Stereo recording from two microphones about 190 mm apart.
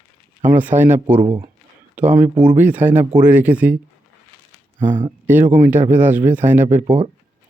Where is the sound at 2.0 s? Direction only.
5° right (ahead or behind).